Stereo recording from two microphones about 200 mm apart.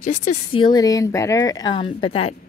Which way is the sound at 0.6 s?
20° left (ahead or behind).